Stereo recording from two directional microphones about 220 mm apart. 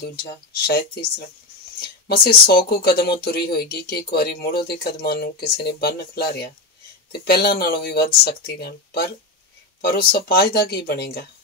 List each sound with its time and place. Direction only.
0.5 s speech: 45° left (ahead or behind)